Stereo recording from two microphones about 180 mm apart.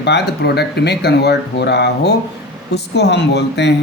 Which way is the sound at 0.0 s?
65° left (ahead or behind).